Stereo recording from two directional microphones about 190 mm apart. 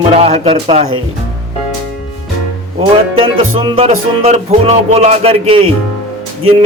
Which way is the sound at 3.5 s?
30° right (ahead or behind).